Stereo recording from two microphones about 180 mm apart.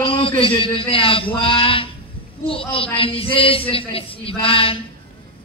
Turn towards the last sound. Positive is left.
turn(degrees=30)  # may be behind; listen again after turning